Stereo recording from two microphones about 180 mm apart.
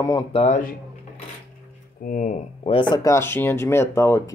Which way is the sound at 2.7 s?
25° left (ahead or behind).